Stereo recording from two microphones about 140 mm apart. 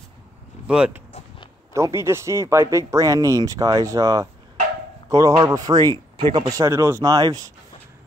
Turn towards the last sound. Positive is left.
turn(degrees=-30)  # may be behind; listen again after turning